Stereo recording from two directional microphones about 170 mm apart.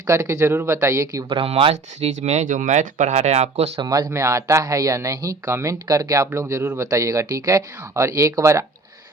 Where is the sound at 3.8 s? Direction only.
25° right (ahead or behind).